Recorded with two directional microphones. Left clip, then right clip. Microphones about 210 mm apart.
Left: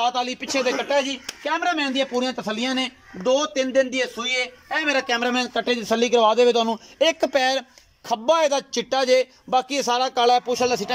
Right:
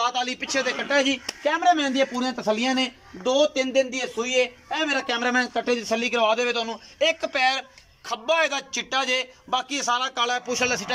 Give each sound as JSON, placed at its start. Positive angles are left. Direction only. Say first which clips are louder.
{"t": 0.0, "sound": "a man's voice", "louder": "left 2 dB", "side_deg": 20}
{"t": 0.8, "sound": "a man's voice", "louder": "even", "side_deg": 5}
{"t": 2.5, "sound": "speech", "louder": "right 1 dB", "side_deg": -25}
{"t": 4.2, "sound": "a man's voice", "louder": "right 1 dB", "side_deg": 0}